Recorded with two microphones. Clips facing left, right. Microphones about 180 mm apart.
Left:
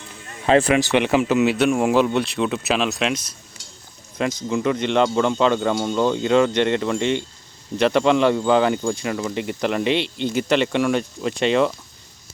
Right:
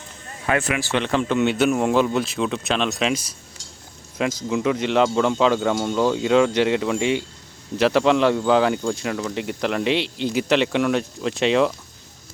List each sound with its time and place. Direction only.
0.4 s speech: 30° left (ahead or behind)
0.9 s speech: 15° left (ahead or behind)
4.4 s speech: centre (ahead or behind)